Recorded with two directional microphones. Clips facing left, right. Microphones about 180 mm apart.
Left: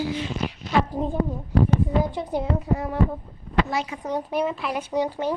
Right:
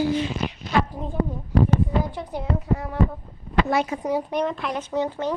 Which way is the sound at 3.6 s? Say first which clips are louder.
Right 5 dB; 60° right (ahead or behind).